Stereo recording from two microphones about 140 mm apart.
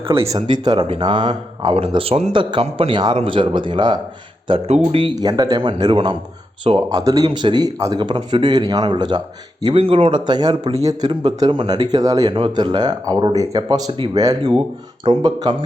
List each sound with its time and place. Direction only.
0.2 s a man's voice: 25° right (ahead or behind)
7.0 s a man's voice: 25° right (ahead or behind)
11.1 s a man's voice: 40° right (ahead or behind)
11.3 s a man's voice: 30° right (ahead or behind)